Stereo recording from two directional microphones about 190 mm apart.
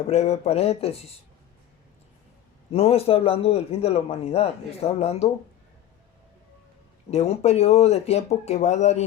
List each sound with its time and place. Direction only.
0.1 s a man's voice: 35° left (ahead or behind)
2.7 s a man's voice: 30° left (ahead or behind)
7.1 s a man's voice: 35° left (ahead or behind)